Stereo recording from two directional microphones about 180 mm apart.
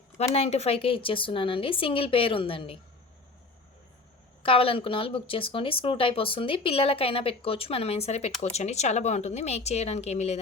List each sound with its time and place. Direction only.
0.3 s speech: 35° left (ahead or behind)
4.4 s speech: 30° left (ahead or behind)